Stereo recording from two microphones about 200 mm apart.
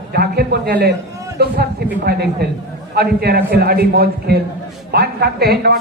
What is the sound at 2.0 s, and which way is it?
A man's voice, 55° right (ahead or behind).